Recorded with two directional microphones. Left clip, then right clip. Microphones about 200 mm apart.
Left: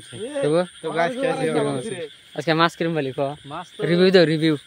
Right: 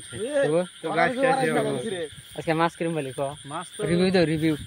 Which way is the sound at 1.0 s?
15° left (ahead or behind).